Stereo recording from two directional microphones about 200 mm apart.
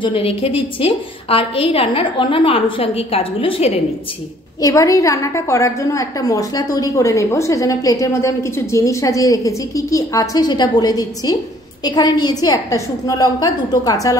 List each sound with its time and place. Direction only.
0.0 s a woman's voice: 30° left (ahead or behind)
4.6 s a woman's voice: 15° left (ahead or behind)